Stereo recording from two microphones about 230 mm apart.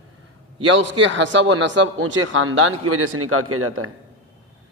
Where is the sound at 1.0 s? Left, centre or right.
Right.